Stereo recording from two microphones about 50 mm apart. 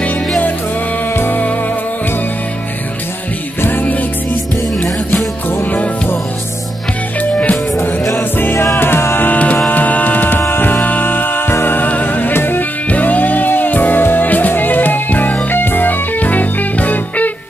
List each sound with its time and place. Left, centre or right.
1.1 s music: left
3.6 s music: left
7.2 s music: left
8.2 s music: left
9.3 s music: left